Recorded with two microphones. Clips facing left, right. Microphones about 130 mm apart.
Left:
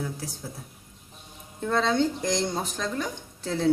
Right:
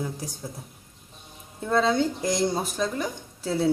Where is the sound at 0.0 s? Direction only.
15° right (ahead or behind).